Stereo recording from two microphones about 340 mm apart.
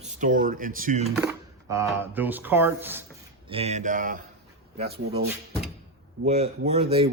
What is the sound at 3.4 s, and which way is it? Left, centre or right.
Speech, centre.